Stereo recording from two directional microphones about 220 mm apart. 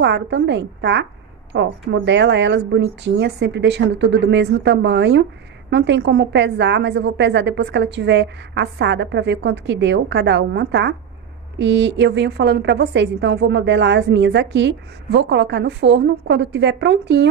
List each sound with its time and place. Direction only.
0.0 s a woman's voice: 50° right (ahead or behind)